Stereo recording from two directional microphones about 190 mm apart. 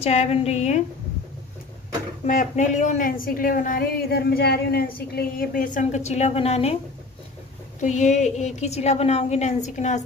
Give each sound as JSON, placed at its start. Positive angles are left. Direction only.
{"t": 0.0, "sound": "a woman's voice", "side_deg": 35}
{"t": 2.2, "sound": "speech", "side_deg": 40}
{"t": 7.8, "sound": "a woman's voice", "side_deg": 40}